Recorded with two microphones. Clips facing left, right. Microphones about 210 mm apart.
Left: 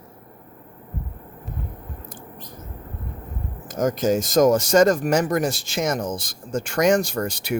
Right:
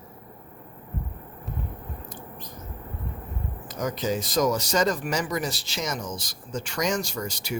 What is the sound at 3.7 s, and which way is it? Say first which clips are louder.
Speech: left 7 dB; 45° left (ahead or behind).